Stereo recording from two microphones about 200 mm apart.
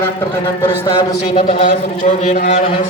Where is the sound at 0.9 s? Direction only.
25° left (ahead or behind).